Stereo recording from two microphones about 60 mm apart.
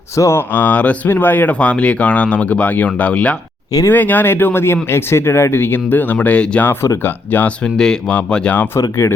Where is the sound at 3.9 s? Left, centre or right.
Left.